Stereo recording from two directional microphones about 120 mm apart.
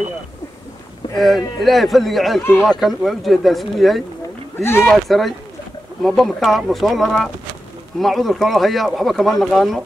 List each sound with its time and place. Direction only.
1.1 s speech: centre (ahead or behind)
4.6 s speech: 20° left (ahead or behind)
4.8 s speech: 5° left (ahead or behind)